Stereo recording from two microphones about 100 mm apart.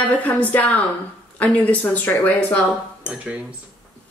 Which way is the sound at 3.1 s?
15° right (ahead or behind).